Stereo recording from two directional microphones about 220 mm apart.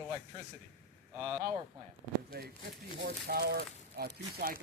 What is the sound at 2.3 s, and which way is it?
Speech, 45° right (ahead or behind).